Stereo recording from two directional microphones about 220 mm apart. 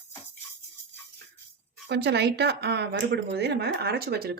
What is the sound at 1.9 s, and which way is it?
Speech, 50° right (ahead or behind).